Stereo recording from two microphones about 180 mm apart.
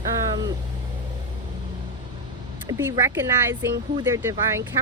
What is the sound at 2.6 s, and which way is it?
Speech, 15° right (ahead or behind).